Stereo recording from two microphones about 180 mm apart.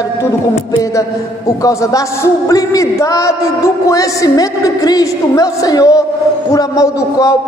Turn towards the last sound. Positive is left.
turn(degrees=20)  # may be behind; listen again after turning